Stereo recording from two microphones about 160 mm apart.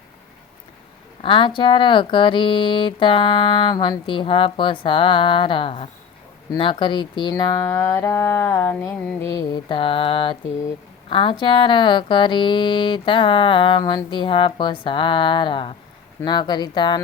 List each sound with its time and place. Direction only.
1.2 s speech: 30° left (ahead or behind)